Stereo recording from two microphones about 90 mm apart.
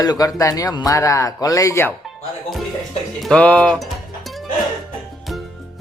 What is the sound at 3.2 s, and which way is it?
Speech, 10° left (ahead or behind).